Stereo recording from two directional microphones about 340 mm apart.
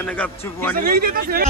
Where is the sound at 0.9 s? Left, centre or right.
Right.